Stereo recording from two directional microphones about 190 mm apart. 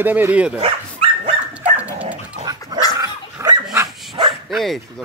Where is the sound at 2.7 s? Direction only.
20° right (ahead or behind).